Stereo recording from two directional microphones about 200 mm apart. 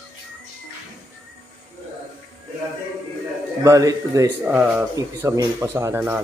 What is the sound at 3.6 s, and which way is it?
Speech, 15° right (ahead or behind).